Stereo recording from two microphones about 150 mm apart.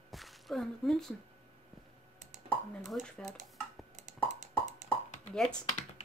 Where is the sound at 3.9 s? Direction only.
50° right (ahead or behind).